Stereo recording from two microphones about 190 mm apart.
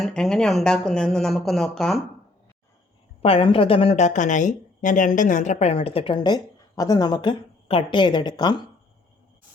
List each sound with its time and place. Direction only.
0.0 s speech: 5° left (ahead or behind)
3.2 s speech: 30° left (ahead or behind)